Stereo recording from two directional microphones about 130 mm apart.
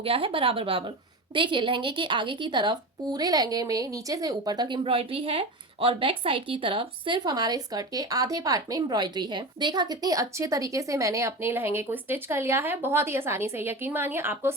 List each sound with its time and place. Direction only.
0.0 s a woman's voice: 45° right (ahead or behind); by 14.5 s 15° right (ahead or behind)